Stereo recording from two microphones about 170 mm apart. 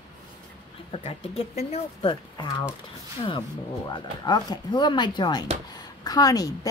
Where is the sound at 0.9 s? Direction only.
35° left (ahead or behind).